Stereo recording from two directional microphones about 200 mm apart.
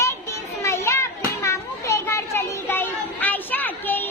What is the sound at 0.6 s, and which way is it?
Children playing, 15° left (ahead or behind).